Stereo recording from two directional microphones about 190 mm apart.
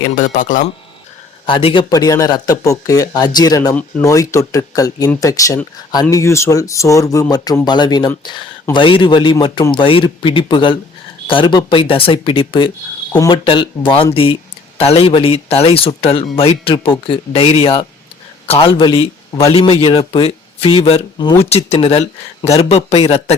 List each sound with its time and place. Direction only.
0.2 s speech: 45° left (ahead or behind)
1.5 s a man's voice: 25° left (ahead or behind)
19.5 s speech: 30° left (ahead or behind)